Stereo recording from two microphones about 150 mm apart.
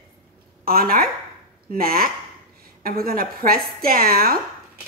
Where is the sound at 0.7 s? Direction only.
75° right (ahead or behind).